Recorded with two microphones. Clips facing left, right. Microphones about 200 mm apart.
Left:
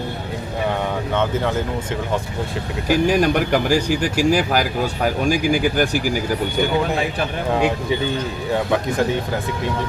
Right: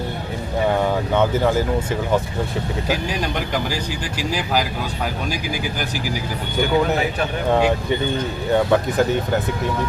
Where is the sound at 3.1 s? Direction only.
50° left (ahead or behind).